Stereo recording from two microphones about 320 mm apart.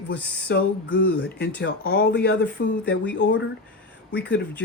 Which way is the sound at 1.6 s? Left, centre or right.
Left.